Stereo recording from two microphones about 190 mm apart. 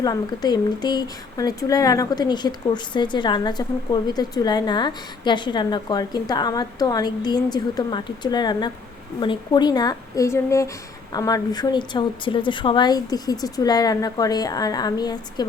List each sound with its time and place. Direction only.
0.0 s speech: 20° left (ahead or behind)